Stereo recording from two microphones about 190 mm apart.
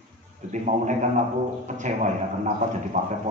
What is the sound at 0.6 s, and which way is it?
A man's voice, 40° right (ahead or behind).